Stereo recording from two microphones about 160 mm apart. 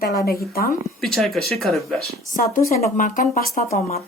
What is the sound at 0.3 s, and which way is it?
Speech, 70° left (ahead or behind).